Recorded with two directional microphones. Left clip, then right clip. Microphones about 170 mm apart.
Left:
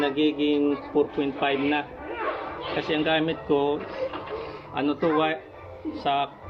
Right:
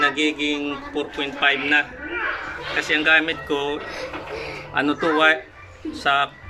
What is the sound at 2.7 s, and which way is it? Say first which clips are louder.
Speech: right 7 dB; 20° left (ahead or behind).